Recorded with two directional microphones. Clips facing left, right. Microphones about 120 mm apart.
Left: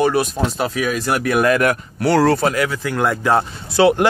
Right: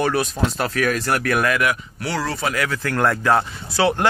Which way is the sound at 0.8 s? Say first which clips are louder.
Even; 10° left (ahead or behind).